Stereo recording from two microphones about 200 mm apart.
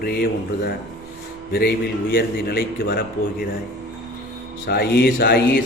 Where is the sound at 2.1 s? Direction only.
50° left (ahead or behind).